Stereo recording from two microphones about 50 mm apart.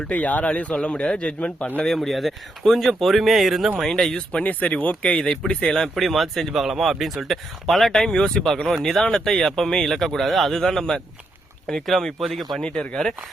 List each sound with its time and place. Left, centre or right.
0.1 s speech: left
1.8 s speech: centre
4.0 s speech: centre
4.4 s speech: left; by 5.7 s centre
5.9 s speech: centre
12.6 s speech: left